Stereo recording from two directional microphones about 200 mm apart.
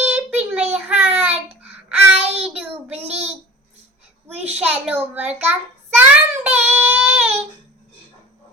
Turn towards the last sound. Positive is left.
turn(degrees=-10)  # may be behind; listen again after turning